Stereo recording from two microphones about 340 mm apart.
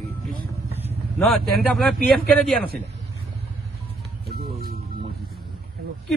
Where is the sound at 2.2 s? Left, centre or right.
Centre.